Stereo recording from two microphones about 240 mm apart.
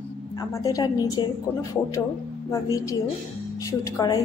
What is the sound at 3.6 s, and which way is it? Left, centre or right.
Speech, centre.